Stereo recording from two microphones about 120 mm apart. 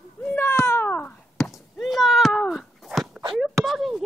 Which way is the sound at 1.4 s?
Centre (ahead or behind).